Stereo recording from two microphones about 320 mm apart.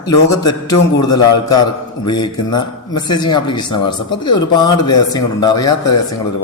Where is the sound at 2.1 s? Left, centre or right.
Centre.